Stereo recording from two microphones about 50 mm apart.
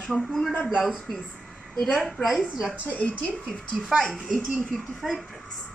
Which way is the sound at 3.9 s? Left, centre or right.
Centre.